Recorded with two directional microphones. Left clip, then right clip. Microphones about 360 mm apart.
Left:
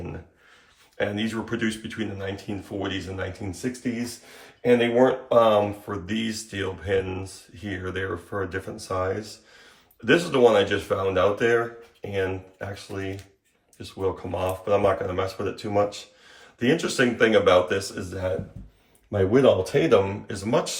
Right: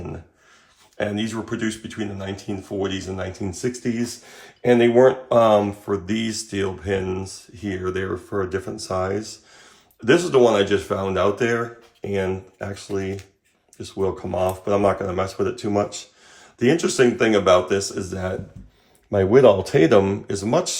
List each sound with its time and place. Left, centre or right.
0.9 s speech: centre
14.2 s speech: right
14.6 s speech: centre